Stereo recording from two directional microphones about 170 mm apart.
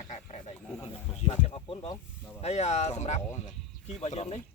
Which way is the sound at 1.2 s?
35° left (ahead or behind).